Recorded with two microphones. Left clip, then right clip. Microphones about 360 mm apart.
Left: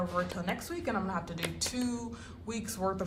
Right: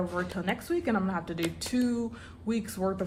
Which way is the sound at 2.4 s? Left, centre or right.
Centre.